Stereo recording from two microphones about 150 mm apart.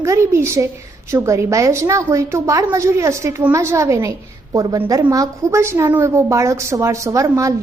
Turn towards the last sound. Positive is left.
turn(degrees=-20)  # may be behind; listen again after turning